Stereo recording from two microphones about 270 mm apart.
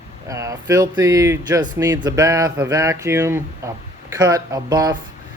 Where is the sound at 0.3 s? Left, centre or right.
Centre.